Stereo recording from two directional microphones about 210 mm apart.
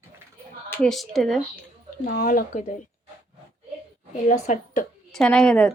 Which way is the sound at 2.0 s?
45° left (ahead or behind).